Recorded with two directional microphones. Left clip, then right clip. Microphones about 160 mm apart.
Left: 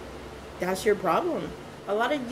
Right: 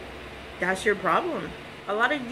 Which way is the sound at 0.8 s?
15° left (ahead or behind).